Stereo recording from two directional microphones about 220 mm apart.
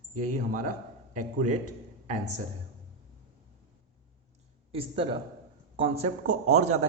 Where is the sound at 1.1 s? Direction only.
35° right (ahead or behind).